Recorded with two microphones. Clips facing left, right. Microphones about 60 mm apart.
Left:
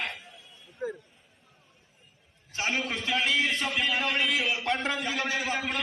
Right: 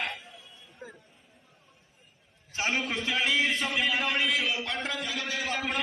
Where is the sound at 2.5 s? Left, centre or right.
Centre.